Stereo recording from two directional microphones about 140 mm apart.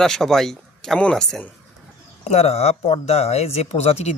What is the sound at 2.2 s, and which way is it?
Speech, 50° left (ahead or behind).